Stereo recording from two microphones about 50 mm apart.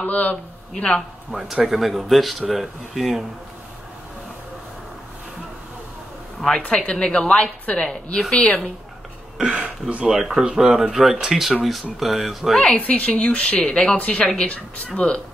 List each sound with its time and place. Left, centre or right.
0.0 s a man's voice: left
1.3 s speech: right
1.7 s speech: centre
6.5 s a woman's voice: centre
9.4 s speech: right
10.0 s speech: centre
12.5 s a woman's voice: left